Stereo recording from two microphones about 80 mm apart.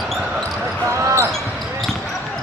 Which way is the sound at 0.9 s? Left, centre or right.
Right.